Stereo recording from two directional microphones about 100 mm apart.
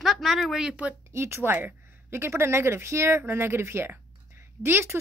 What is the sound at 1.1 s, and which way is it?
Speech, 25° right (ahead or behind).